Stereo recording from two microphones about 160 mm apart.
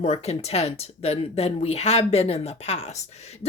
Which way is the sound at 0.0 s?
40° left (ahead or behind).